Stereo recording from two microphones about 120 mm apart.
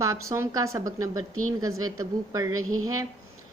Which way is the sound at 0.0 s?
25° right (ahead or behind).